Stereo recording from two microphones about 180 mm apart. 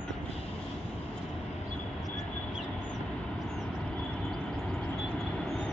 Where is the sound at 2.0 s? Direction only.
Centre (ahead or behind).